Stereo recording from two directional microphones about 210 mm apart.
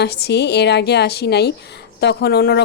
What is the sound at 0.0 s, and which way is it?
A woman's voice, 50° left (ahead or behind).